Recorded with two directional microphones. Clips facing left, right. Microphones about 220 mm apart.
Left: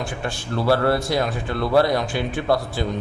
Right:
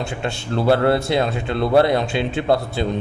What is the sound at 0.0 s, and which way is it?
Speech, 25° right (ahead or behind).